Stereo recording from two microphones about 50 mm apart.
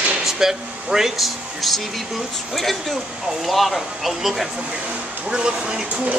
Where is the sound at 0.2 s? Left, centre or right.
Centre.